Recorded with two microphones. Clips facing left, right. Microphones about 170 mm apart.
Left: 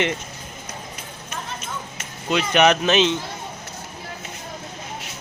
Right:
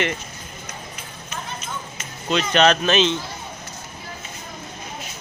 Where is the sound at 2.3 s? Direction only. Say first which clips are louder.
Even; 15° left (ahead or behind).